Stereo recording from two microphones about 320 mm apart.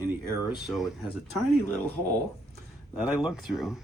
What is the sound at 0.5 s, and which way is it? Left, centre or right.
Speech, centre.